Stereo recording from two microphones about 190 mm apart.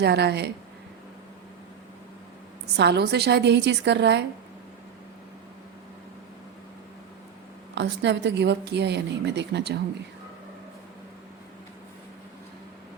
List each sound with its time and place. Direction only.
0.0 s a woman's voice: 60° right (ahead or behind)
2.7 s a woman's voice: 60° right (ahead or behind)
7.8 s a woman's voice: 65° right (ahead or behind)